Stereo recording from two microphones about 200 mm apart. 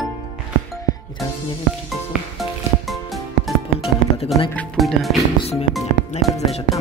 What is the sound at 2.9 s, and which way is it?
Music, centre (ahead or behind).